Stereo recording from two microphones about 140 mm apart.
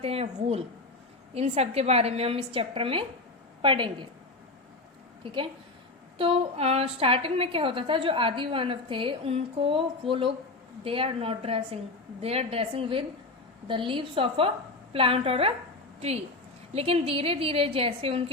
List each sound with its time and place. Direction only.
0.0 s a woman's voice: 45° right (ahead or behind)
5.2 s a woman's voice: 35° right (ahead or behind)